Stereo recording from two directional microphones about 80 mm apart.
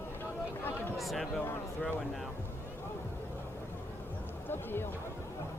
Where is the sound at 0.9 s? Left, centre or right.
Centre.